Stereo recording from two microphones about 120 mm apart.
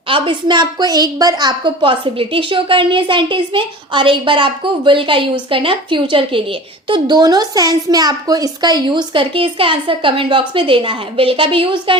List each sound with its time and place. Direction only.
0.1 s a woman's voice: 40° right (ahead or behind)